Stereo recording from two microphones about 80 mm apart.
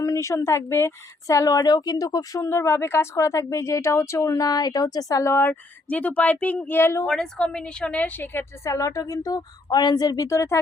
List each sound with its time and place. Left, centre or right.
0.0 s speech: left
2.4 s a woman's voice: left
5.2 s speech: left
7.3 s a woman's voice: centre; by 8.7 s left
8.7 s speech: left
10.2 s a woman's voice: left